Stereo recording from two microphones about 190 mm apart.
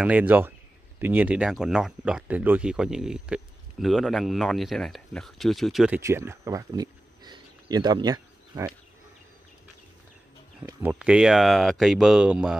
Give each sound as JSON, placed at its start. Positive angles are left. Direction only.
{"t": 0.0, "sound": "speech", "side_deg": -5}
{"t": 5.9, "sound": "a sound", "side_deg": -15}
{"t": 10.6, "sound": "speech", "side_deg": -10}